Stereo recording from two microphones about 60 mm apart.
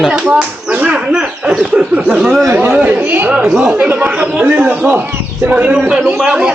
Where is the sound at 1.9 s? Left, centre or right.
Centre.